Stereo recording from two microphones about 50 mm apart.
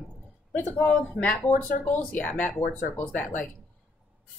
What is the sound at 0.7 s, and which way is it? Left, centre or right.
A woman's voice, left.